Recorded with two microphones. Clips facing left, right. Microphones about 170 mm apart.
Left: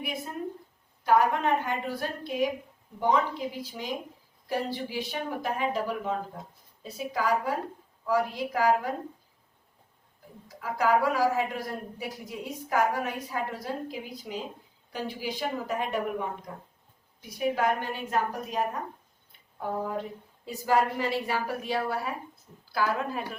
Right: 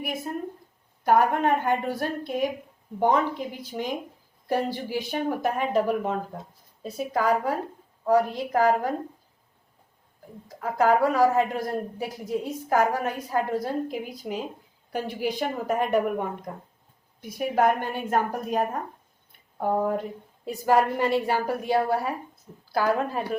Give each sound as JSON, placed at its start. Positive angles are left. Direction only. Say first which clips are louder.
{"t": 1.0, "sound": "a woman's voice", "louder": "right 3 dB", "side_deg": -50}
{"t": 10.6, "sound": "a woman's voice", "louder": "right 4 dB", "side_deg": -50}
{"t": 22.8, "sound": "a woman's voice", "louder": "right 4 dB", "side_deg": -35}